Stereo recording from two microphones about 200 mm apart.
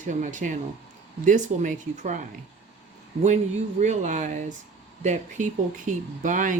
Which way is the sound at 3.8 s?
35° right (ahead or behind).